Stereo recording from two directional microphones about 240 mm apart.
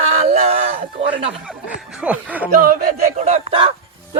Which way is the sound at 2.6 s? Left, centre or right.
Right.